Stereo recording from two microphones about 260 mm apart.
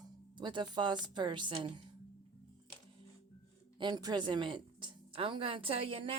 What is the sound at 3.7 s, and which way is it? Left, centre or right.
A woman's voice, centre.